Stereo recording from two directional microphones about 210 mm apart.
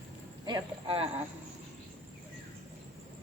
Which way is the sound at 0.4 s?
25° right (ahead or behind).